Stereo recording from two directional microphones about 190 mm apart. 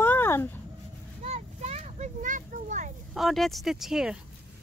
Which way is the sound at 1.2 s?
35° right (ahead or behind).